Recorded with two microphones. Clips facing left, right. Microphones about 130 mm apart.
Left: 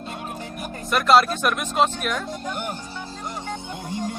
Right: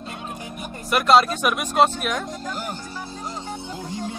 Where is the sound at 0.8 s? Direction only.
Centre (ahead or behind).